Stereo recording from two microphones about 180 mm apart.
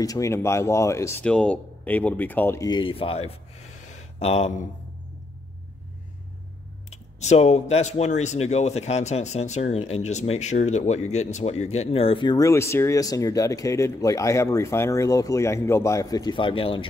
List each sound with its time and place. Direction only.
0.0 s speech: 20° left (ahead or behind)
1.2 s speech: 5° left (ahead or behind); by 4.6 s 35° left (ahead or behind)
6.9 s speech: 40° left (ahead or behind)